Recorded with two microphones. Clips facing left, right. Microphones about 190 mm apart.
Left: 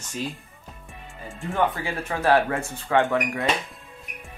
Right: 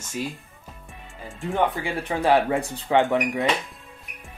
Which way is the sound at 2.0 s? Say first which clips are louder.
Right 1 dB; 15° right (ahead or behind).